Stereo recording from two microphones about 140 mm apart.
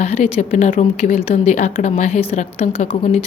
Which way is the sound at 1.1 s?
55° left (ahead or behind).